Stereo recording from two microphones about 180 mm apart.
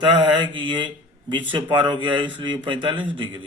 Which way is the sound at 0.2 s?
25° right (ahead or behind).